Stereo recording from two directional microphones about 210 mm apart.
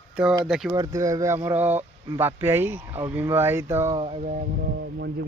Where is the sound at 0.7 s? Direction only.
15° right (ahead or behind).